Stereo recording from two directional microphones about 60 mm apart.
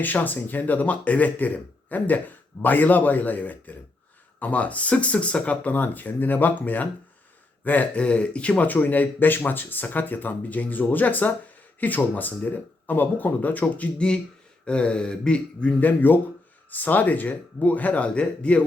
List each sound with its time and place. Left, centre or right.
0.0 s speech: left
14.6 s a sound: centre
15.8 s speech: left